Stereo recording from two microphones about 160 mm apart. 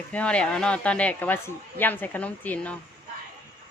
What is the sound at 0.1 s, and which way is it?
A woman's voice, 5° left (ahead or behind).